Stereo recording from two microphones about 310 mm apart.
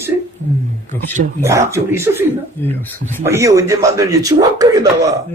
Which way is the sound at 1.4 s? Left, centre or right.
Centre.